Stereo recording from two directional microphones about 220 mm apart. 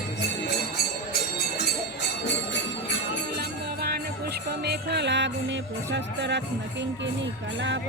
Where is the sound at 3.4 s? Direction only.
45° right (ahead or behind).